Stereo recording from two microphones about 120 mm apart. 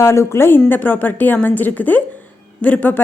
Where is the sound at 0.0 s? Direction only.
20° left (ahead or behind).